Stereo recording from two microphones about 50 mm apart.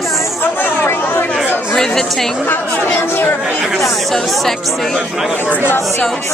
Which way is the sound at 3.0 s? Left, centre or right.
Left.